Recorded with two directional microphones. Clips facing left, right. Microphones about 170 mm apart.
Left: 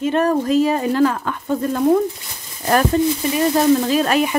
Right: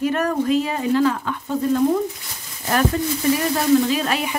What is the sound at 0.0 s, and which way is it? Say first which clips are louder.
Speech: left 3 dB; 25° left (ahead or behind).